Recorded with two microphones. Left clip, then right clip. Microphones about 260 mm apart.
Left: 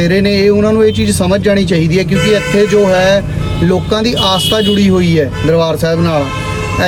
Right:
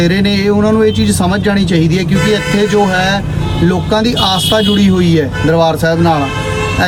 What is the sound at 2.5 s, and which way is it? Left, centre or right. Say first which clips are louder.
Speech: left 3 dB; right.